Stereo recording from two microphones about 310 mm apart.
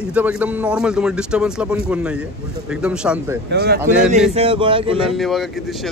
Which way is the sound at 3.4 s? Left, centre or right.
Right.